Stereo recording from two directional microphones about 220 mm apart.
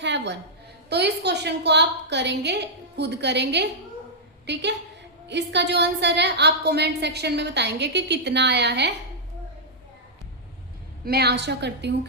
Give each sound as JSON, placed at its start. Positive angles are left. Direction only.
{"t": 0.0, "sound": "a woman's voice", "side_deg": -55}
{"t": 11.0, "sound": "a woman's voice", "side_deg": -45}